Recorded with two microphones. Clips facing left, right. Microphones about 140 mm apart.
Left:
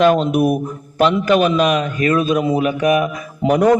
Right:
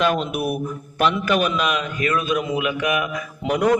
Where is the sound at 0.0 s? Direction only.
45° left (ahead or behind).